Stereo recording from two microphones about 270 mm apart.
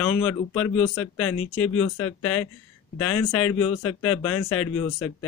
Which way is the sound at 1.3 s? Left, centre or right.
Left.